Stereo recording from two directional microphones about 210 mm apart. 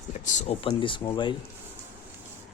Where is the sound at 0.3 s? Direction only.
25° left (ahead or behind).